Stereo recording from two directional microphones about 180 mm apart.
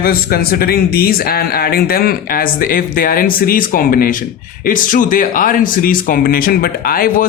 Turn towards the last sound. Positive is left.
turn(degrees=55)  # may be behind; listen again after turning